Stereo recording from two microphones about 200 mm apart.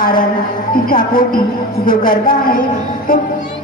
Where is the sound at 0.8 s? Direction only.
45° left (ahead or behind).